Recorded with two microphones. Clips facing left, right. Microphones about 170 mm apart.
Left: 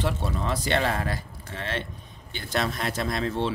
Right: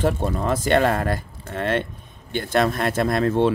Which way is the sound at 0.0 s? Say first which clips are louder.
Right 6 dB; 50° right (ahead or behind).